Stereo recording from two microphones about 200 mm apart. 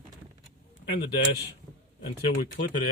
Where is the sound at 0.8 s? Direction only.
60° left (ahead or behind).